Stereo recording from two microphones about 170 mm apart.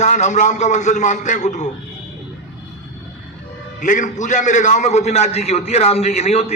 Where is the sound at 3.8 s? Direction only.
50° left (ahead or behind).